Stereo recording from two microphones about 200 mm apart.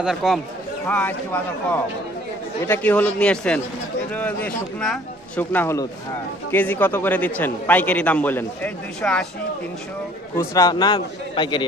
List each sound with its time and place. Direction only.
0.0 s a man's voice: centre (ahead or behind)
10.3 s a man's voice: 15° left (ahead or behind)